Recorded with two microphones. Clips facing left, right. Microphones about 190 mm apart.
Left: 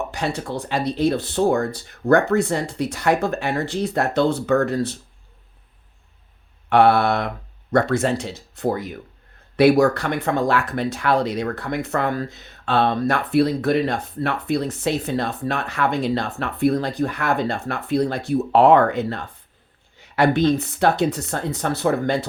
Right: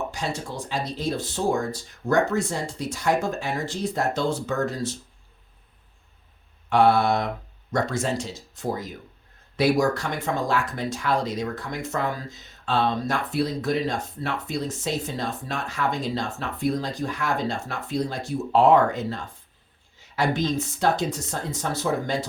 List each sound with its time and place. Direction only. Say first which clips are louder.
0.1 s speech: left 5 dB; 65° left (ahead or behind)
6.7 s speech: left 3 dB; 65° left (ahead or behind)